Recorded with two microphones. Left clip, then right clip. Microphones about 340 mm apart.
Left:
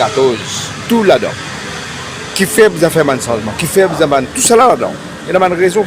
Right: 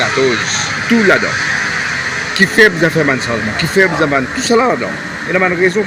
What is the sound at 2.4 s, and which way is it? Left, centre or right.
Speech, left.